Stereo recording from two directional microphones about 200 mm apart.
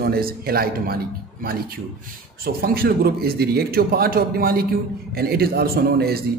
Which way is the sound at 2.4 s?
50° right (ahead or behind).